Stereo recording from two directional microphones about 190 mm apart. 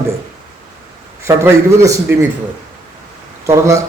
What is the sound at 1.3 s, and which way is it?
A man's voice, 15° right (ahead or behind).